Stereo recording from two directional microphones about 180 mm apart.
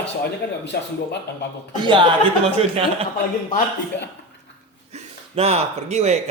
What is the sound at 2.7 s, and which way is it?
Speech, 30° right (ahead or behind).